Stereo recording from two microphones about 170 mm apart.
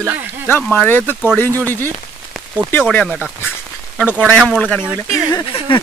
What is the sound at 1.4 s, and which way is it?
Speech, 15° right (ahead or behind).